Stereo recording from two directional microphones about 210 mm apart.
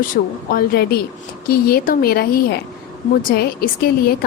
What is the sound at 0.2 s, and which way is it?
Speech, 45° left (ahead or behind).